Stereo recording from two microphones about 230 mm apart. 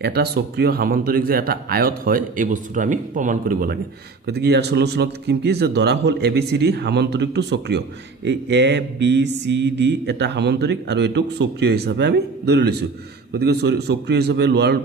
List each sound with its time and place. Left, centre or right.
0.0 s speech: right
4.3 s a man's voice: right